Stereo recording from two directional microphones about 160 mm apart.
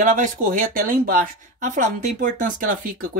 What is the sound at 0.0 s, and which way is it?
Speech, 55° right (ahead or behind).